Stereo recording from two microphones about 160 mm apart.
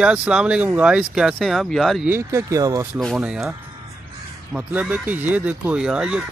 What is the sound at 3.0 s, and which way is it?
Speech, centre (ahead or behind).